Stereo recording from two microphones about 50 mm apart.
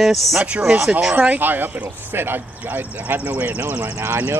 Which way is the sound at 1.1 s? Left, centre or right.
Right.